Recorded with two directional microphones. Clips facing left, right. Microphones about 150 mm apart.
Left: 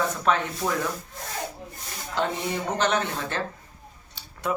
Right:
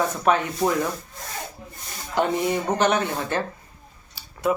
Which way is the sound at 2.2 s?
15° right (ahead or behind).